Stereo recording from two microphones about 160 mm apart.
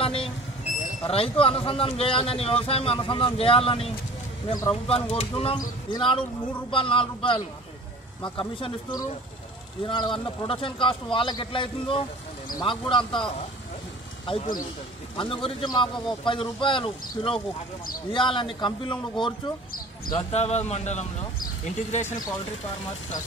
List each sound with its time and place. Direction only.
0.0 s vehicle: 35° left (ahead or behind)
1.0 s speech: 35° left (ahead or behind)
15.1 s a man's voice: 30° left (ahead or behind)